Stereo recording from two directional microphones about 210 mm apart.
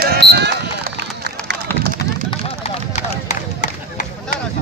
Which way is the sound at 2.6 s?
30° left (ahead or behind).